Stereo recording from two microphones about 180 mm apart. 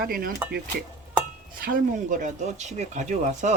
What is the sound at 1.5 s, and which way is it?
Speech, 50° right (ahead or behind).